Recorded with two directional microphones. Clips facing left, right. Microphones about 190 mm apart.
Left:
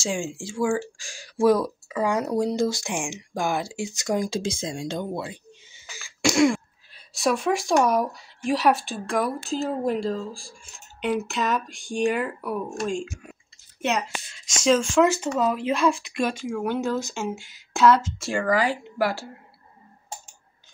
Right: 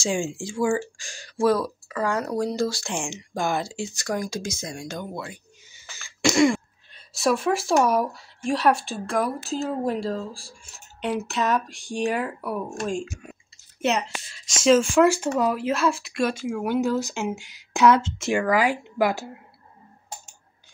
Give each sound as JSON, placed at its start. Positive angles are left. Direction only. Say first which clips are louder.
{"t": 0.0, "sound": "speech", "louder": "right 2 dB", "side_deg": 5}
{"t": 5.9, "sound": "throat clearing", "louder": "right 1 dB", "side_deg": 10}
{"t": 7.2, "sound": "speech", "louder": "right 1 dB", "side_deg": 0}